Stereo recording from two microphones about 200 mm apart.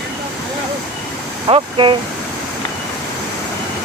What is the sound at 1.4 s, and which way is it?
Speech, 25° right (ahead or behind).